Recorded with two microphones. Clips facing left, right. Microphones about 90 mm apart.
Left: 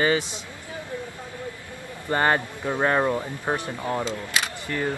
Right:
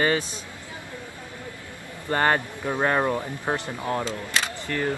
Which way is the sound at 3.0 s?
10° right (ahead or behind).